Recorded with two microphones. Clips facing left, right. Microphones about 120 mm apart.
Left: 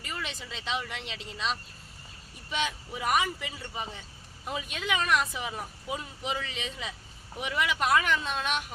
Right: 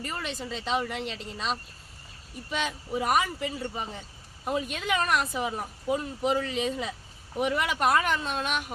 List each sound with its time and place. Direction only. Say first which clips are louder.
0.0 s speech: right 4 dB; 40° right (ahead or behind)
2.5 s speech: right 2 dB; 40° right (ahead or behind)